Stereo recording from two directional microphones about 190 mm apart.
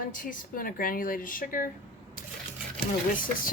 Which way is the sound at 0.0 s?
45° left (ahead or behind).